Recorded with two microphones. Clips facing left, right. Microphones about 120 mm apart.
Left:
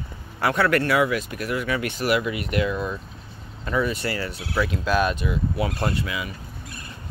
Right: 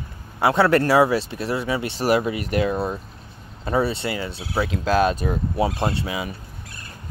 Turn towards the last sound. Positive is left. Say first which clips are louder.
# right 2 dB
turn(degrees=-30)  # may be behind; listen again after turning